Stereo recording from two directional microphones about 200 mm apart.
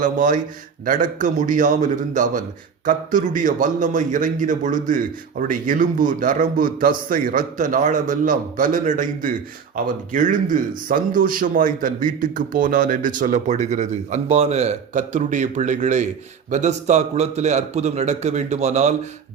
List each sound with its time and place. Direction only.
0.0 s a man's voice: 40° right (ahead or behind)